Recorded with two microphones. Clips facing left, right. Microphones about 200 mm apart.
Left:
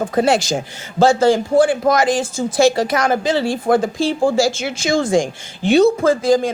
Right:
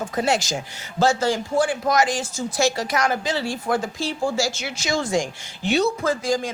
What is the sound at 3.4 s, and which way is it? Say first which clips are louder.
Speech: left 8 dB; 55° left (ahead or behind).